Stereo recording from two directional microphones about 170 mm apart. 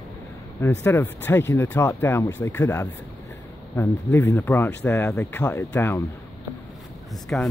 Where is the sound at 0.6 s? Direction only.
15° left (ahead or behind).